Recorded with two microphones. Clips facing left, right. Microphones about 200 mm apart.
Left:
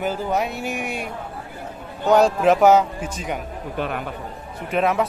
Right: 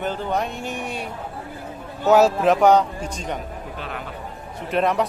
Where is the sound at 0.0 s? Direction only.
5° left (ahead or behind).